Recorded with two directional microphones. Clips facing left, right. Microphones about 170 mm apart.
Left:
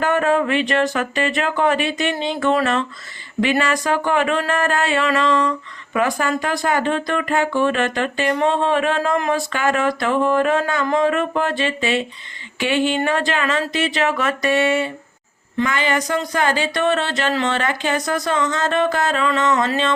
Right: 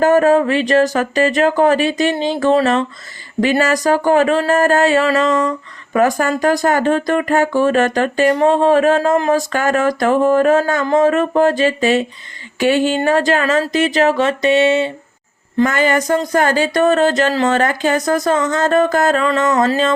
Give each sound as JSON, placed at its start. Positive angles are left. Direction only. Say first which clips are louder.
{"t": 0.0, "sound": "speech", "louder": "right 6 dB", "side_deg": -40}
{"t": 15.5, "sound": "speech", "louder": "right 6 dB", "side_deg": -45}